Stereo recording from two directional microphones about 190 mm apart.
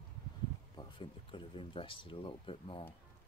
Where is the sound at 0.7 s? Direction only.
25° left (ahead or behind).